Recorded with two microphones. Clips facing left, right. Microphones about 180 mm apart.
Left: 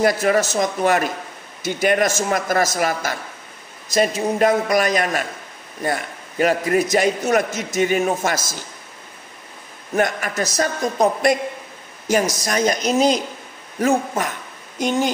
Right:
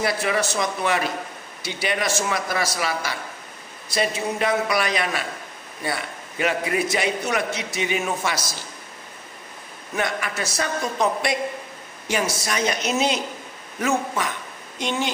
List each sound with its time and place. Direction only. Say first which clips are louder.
0.0 s a man's voice: left 6 dB; 45° left (ahead or behind)
9.9 s a man's voice: left 6 dB; 45° left (ahead or behind)